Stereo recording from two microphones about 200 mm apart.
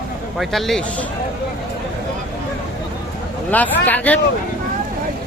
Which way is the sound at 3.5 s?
10° left (ahead or behind).